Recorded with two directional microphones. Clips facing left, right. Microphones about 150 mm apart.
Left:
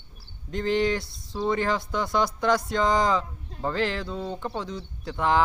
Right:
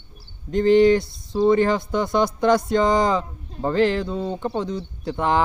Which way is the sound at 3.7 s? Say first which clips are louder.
Right 9 dB; 50° right (ahead or behind).